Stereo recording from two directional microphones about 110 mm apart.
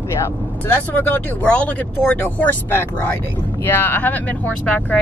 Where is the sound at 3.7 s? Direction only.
20° left (ahead or behind).